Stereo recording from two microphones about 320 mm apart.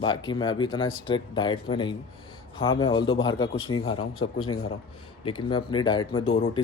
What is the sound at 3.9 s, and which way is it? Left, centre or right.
Speech, left.